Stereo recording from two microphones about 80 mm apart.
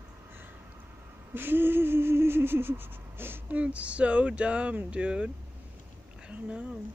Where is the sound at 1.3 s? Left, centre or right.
Right.